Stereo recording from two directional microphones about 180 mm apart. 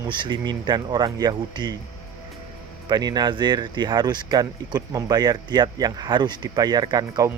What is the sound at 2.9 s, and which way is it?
Speech, 20° right (ahead or behind).